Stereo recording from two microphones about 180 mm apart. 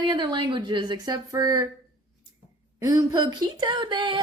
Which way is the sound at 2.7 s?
20° right (ahead or behind).